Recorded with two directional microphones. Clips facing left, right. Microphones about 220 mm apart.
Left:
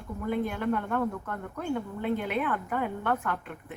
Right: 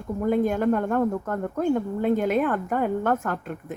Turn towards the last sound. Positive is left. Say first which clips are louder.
# right 5 dB
turn(degrees=-40)  # may be behind; listen again after turning